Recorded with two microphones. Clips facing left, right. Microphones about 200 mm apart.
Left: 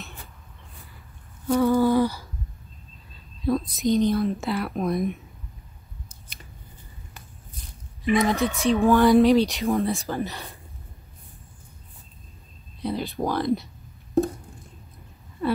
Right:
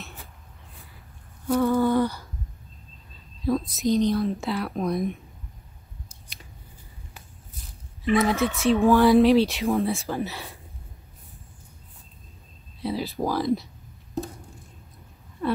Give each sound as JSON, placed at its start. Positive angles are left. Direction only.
{"t": 1.7, "sound": "humming", "side_deg": 5}
{"t": 3.4, "sound": "speech", "side_deg": 0}
{"t": 8.2, "sound": "speech", "side_deg": -5}
{"t": 12.8, "sound": "speech", "side_deg": 0}
{"t": 14.2, "sound": "a sound", "side_deg": 55}